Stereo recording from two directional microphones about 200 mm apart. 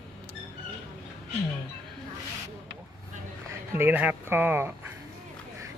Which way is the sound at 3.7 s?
10° right (ahead or behind).